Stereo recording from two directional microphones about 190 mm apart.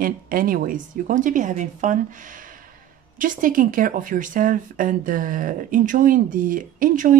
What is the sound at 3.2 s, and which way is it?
Speech, 45° right (ahead or behind).